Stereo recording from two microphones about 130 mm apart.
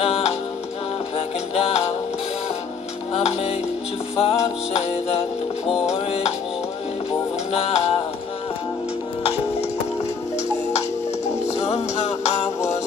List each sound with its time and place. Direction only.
0.0 s music: 50° left (ahead or behind)
3.1 s music: 50° left (ahead or behind)
7.5 s music: 50° left (ahead or behind)
11.4 s music: 55° left (ahead or behind)